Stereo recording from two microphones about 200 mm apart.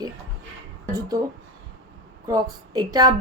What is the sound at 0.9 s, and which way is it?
Speech, 20° right (ahead or behind).